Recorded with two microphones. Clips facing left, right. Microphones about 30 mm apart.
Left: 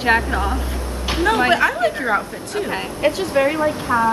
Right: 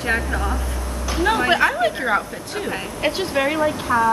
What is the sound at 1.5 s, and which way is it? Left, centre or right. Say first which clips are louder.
A woman's voice: left 1 dB; centre.